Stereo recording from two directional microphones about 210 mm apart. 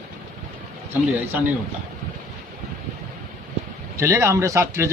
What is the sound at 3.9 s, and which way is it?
Speech, 15° right (ahead or behind).